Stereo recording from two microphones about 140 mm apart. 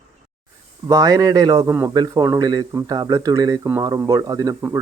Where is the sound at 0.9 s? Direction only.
25° right (ahead or behind).